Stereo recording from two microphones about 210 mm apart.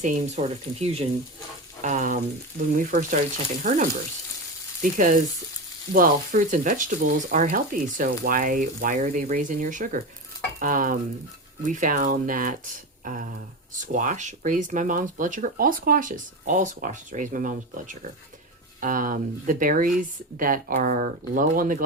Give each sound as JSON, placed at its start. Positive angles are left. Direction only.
{"t": 0.0, "sound": "speech", "side_deg": -30}